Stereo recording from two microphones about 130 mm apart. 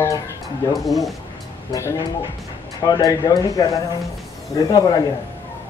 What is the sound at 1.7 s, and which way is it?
Speech, 25° left (ahead or behind).